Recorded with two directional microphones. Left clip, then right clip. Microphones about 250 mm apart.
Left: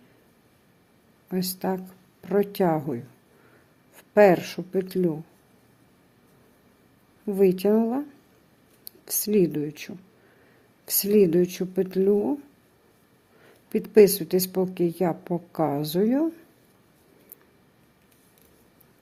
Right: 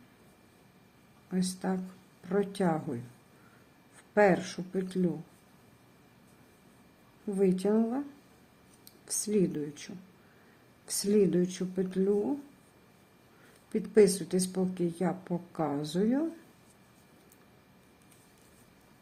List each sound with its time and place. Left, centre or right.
1.3 s a woman's voice: left
4.1 s a woman's voice: left
7.3 s a woman's voice: left
9.0 s a woman's voice: left
13.7 s a woman's voice: left